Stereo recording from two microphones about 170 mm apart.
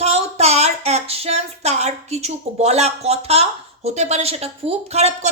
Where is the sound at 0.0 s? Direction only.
40° right (ahead or behind).